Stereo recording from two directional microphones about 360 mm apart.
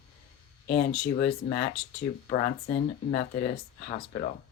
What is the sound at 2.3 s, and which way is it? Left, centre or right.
Speech, left.